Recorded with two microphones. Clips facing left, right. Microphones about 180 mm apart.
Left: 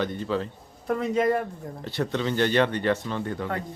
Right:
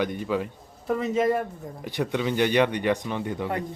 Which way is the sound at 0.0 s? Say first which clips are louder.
Right 1 dB; 15° right (ahead or behind).